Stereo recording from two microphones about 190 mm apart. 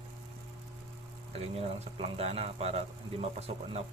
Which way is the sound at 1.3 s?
30° right (ahead or behind).